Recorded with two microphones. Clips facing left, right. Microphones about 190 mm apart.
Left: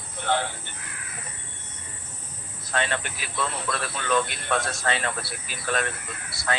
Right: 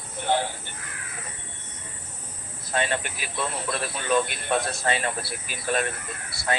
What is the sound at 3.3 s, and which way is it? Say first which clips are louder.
Speech: even; 25° right (ahead or behind).